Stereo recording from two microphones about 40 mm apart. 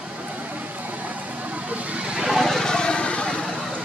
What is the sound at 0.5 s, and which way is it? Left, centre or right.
Vehicle, right.